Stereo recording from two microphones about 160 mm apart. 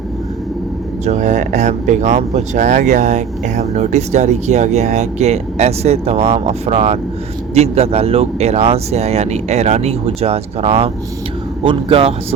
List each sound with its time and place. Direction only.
1.0 s speech: 50° right (ahead or behind)